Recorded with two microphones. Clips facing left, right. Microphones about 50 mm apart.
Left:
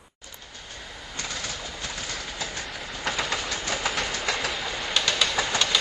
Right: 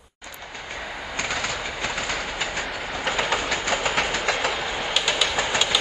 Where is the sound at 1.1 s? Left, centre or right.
Right.